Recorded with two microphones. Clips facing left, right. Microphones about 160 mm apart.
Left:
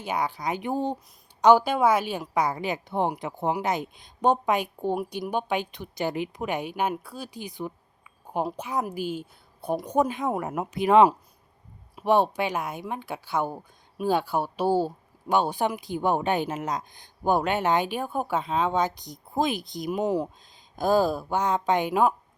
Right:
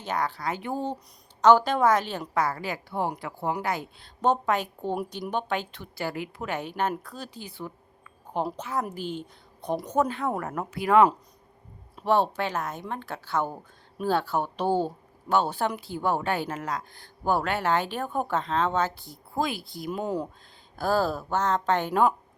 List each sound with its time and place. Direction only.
0.0 s speech: 10° left (ahead or behind)